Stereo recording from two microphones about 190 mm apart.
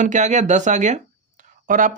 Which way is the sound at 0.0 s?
40° right (ahead or behind).